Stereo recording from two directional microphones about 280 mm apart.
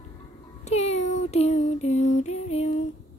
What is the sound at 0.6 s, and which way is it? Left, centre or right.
Music, left.